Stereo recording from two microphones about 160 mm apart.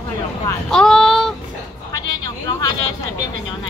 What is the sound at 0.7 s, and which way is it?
Child singing, 5° left (ahead or behind).